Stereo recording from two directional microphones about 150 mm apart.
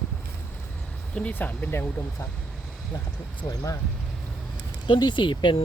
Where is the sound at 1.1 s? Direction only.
10° left (ahead or behind).